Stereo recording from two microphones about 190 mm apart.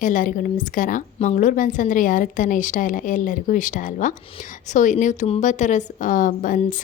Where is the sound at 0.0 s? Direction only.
45° left (ahead or behind).